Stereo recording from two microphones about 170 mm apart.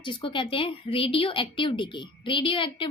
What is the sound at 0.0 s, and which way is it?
Speech, 30° left (ahead or behind).